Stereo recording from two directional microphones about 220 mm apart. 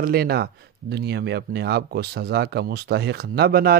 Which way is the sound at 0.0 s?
45° right (ahead or behind).